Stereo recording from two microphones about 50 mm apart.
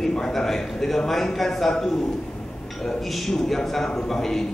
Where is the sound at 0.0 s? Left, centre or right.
Centre.